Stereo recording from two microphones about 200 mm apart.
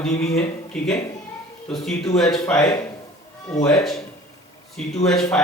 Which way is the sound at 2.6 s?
15° left (ahead or behind).